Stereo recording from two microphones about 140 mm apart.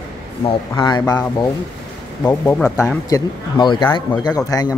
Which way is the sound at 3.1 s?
25° left (ahead or behind).